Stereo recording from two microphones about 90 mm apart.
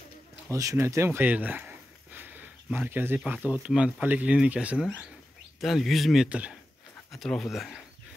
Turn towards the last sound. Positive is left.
turn(degrees=0)  # may be behind; listen again after turning